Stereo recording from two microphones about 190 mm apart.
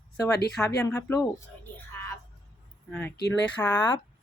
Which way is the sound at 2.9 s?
10° left (ahead or behind).